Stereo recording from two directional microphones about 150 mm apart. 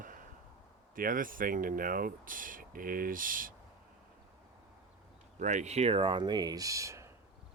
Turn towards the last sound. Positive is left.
turn(degrees=-20)  # may be behind; listen again after turning